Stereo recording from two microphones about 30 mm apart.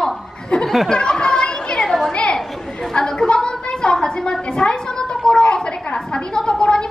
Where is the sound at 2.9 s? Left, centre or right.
Left.